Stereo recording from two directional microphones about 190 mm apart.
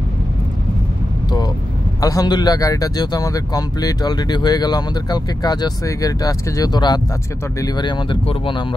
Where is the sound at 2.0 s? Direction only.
20° left (ahead or behind).